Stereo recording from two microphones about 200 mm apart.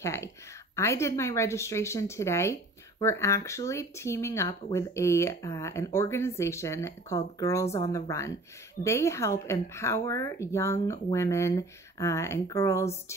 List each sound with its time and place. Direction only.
0.0 s speech: 15° left (ahead or behind)